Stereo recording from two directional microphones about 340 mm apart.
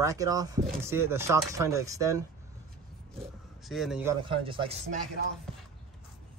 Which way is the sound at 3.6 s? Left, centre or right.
Centre.